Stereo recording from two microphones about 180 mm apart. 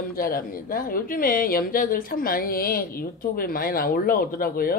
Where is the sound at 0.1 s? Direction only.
55° left (ahead or behind).